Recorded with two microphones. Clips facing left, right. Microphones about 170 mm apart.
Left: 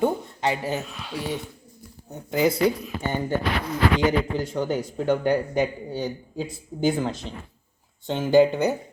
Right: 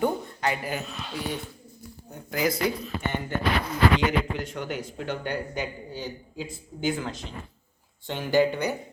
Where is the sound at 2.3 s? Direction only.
25° left (ahead or behind).